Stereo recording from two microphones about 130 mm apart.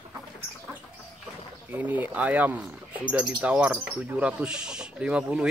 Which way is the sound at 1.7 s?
15° right (ahead or behind).